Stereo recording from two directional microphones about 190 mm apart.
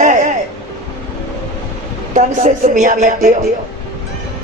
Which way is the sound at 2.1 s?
40° right (ahead or behind).